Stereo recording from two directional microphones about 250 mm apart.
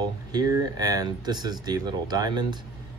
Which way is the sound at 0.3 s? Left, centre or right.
Centre.